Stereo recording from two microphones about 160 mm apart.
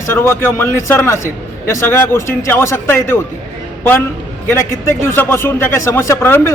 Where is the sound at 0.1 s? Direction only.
15° left (ahead or behind).